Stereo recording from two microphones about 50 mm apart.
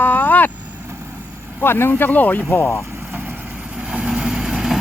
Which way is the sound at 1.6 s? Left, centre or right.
Left.